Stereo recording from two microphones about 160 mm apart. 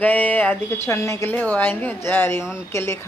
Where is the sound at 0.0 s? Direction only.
10° left (ahead or behind).